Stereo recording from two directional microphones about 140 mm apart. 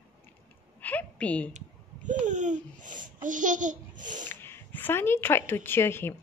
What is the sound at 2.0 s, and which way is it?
A child's voice, 60° right (ahead or behind).